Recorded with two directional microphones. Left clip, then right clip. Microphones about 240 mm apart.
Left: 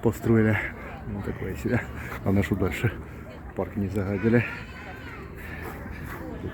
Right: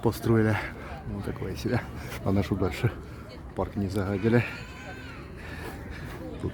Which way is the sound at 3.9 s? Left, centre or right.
Centre.